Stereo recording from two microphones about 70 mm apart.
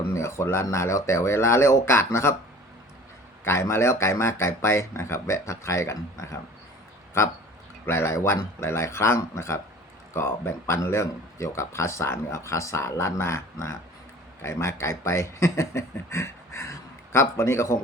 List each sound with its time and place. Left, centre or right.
0.1 s speech: left
3.4 s speech: left
7.9 s speech: left